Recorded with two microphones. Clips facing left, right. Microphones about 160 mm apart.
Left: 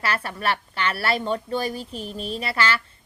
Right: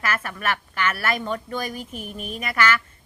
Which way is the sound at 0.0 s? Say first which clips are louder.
Left 1 dB; 35° left (ahead or behind).